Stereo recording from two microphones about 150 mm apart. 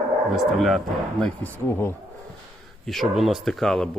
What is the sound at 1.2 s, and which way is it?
Speech, 15° left (ahead or behind).